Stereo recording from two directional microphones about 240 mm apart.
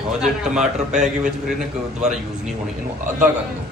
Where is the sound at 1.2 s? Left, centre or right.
Centre.